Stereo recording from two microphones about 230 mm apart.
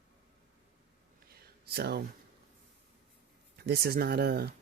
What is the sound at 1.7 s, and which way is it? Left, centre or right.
Speech, right.